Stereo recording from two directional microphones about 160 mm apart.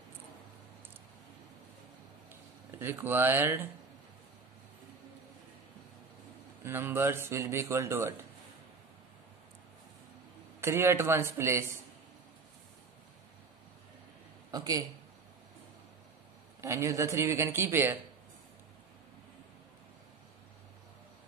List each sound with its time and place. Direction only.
2.8 s a man's voice: 15° right (ahead or behind)
6.6 s a man's voice: 15° right (ahead or behind)
10.6 s a man's voice: 15° right (ahead or behind)
14.5 s a man's voice: 25° right (ahead or behind)
16.6 s a man's voice: 20° right (ahead or behind)